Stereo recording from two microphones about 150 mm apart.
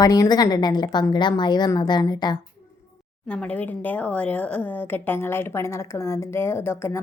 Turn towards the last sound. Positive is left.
turn(degrees=15)  # may be behind; listen again after turning